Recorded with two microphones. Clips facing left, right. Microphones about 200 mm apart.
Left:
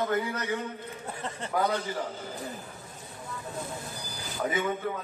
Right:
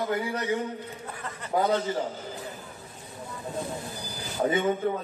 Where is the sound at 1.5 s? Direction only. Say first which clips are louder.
Right 4 dB; 20° right (ahead or behind).